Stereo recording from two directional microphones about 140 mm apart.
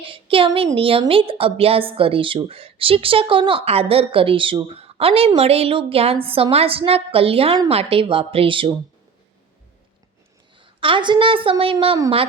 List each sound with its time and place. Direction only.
0.0 s a woman's voice: 40° right (ahead or behind)
10.6 s a woman's voice: 40° right (ahead or behind)